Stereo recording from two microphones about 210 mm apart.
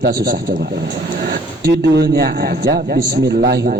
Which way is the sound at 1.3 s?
50° right (ahead or behind).